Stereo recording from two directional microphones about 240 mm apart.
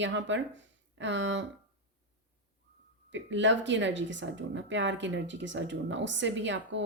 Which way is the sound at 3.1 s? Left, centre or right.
Right.